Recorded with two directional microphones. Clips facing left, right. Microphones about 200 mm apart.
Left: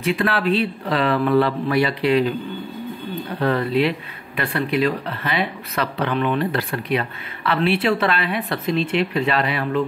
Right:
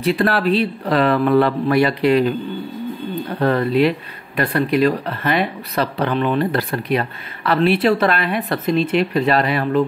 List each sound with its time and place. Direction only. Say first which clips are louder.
0.0 s speech: right 3 dB; 40° right (ahead or behind)
3.3 s speech: right 3 dB; 45° right (ahead or behind)
5.8 s speech: right 3 dB; 35° right (ahead or behind)